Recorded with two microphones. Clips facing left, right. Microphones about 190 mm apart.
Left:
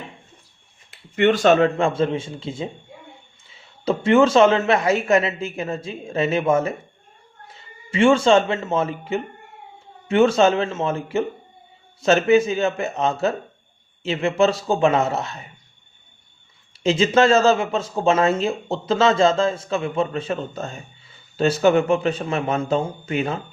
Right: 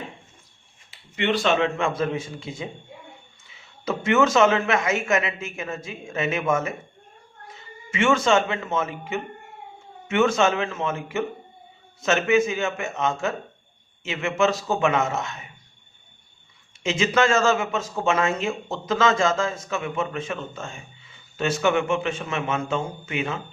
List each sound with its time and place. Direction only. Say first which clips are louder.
0.9 s speech: left 7 dB; 50° left (ahead or behind); by 15.4 s 35° left (ahead or behind)
16.8 s speech: left 5 dB; 35° left (ahead or behind)